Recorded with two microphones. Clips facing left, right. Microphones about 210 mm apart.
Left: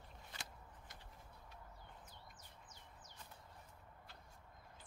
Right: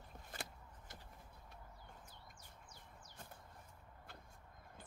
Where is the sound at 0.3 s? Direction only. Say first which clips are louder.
Right 6 dB; 50° right (ahead or behind).